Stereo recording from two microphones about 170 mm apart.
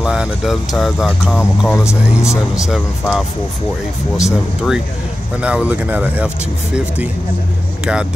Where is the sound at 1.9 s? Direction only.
15° left (ahead or behind).